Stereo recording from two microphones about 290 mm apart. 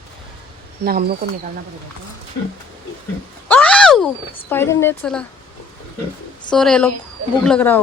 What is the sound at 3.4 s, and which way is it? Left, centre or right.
Speech, centre.